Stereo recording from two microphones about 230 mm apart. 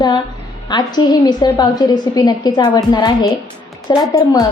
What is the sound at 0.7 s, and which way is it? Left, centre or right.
A woman's voice, centre.